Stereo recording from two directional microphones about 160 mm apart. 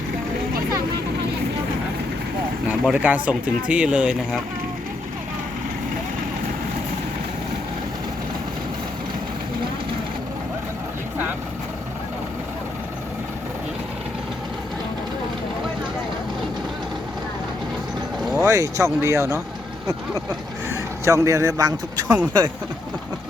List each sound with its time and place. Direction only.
2.6 s speech: 5° right (ahead or behind)
18.4 s a man's voice: 20° right (ahead or behind)
21.0 s a man's voice: 20° right (ahead or behind)
22.0 s speech: 10° right (ahead or behind)